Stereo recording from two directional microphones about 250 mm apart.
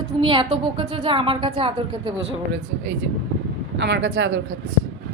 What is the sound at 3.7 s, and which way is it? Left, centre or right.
Speech, right.